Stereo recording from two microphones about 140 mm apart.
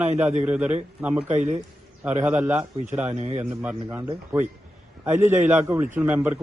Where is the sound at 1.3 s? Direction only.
55° right (ahead or behind).